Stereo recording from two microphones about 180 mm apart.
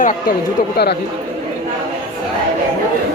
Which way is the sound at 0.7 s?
65° left (ahead or behind).